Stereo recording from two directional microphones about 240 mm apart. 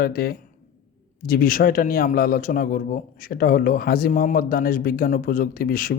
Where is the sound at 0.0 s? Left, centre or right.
Left.